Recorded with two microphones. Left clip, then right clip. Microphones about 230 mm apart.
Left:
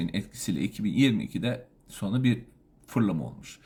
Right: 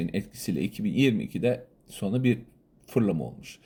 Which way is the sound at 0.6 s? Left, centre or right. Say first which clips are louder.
Even; left.